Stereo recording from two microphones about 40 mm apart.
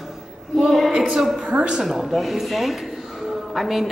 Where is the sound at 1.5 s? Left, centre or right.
Centre.